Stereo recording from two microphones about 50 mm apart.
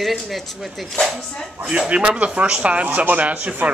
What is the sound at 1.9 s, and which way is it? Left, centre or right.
Speech, right.